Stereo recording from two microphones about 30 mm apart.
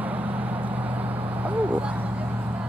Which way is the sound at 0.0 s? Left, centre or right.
Right.